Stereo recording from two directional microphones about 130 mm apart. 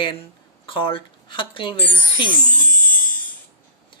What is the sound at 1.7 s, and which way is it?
Speech, 15° left (ahead or behind).